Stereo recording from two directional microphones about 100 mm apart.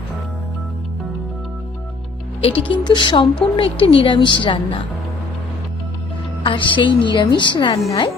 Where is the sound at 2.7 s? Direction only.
50° left (ahead or behind).